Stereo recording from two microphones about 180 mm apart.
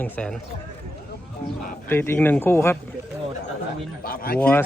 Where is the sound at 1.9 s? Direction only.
15° left (ahead or behind).